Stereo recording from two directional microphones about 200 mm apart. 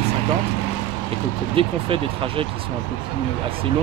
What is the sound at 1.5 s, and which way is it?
Speech, 25° right (ahead or behind).